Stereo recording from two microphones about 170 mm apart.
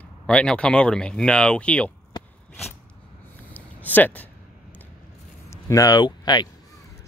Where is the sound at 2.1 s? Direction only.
25° left (ahead or behind).